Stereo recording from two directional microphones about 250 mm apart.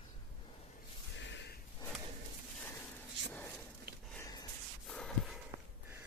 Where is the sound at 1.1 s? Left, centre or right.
Left.